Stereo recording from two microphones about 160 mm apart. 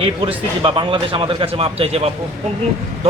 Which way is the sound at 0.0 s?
35° right (ahead or behind).